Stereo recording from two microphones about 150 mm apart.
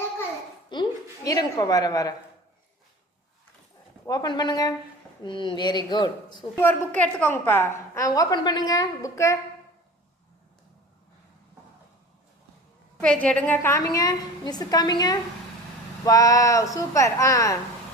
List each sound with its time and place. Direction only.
0.7 s a sound: 25° left (ahead or behind)
4.0 s a woman's voice: 25° left (ahead or behind)
6.6 s a woman's voice: 15° left (ahead or behind)
13.0 s a woman's voice: 5° left (ahead or behind)